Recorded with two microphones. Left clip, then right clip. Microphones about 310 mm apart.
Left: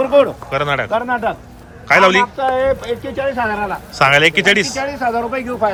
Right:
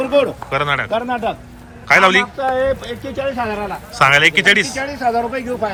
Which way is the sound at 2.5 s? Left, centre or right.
Centre.